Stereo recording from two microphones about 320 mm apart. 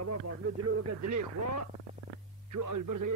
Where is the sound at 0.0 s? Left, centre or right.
Right.